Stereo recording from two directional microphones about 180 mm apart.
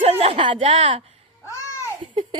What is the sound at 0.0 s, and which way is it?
A woman's voice, 35° right (ahead or behind).